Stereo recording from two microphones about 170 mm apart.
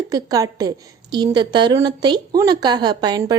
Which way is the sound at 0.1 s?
20° right (ahead or behind).